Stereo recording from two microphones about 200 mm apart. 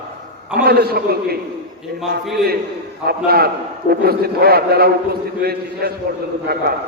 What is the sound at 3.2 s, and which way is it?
A man's voice, 50° right (ahead or behind).